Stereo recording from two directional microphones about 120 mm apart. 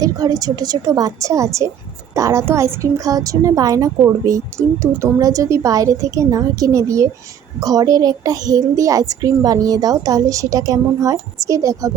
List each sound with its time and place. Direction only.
0.0 s a woman's voice: 30° right (ahead or behind)